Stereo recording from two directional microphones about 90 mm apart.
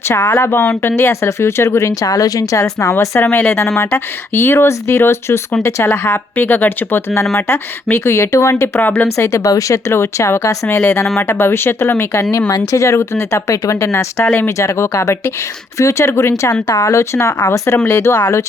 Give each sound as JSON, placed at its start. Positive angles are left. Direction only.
{"t": 0.1, "sound": "speech", "side_deg": 25}
{"t": 3.3, "sound": "speech", "side_deg": 25}